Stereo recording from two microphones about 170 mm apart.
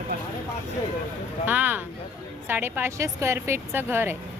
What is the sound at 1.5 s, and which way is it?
A woman's voice, 10° right (ahead or behind).